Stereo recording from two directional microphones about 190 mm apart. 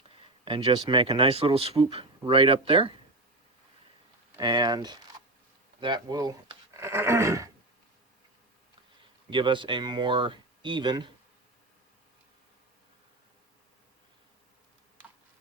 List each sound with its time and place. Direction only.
0.2 s speech: 25° right (ahead or behind)
4.4 s speech: 20° right (ahead or behind)
9.3 s speech: 25° right (ahead or behind)